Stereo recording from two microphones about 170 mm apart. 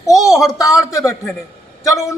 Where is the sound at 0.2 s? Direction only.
20° left (ahead or behind).